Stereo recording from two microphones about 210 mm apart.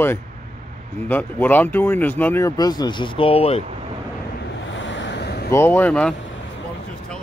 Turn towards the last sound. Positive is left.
turn(degrees=5)  # may be behind; listen again after turning